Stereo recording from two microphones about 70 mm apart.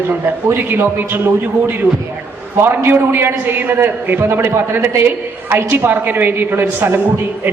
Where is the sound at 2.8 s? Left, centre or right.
Right.